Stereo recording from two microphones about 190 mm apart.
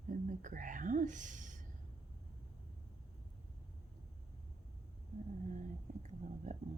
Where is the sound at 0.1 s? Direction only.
45° right (ahead or behind).